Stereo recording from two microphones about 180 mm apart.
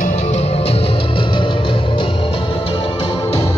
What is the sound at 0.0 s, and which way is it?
Music, 40° left (ahead or behind).